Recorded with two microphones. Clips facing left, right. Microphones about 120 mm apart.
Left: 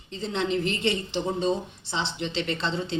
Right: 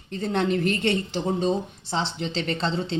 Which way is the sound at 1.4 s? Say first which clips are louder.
Right 2 dB; 40° right (ahead or behind).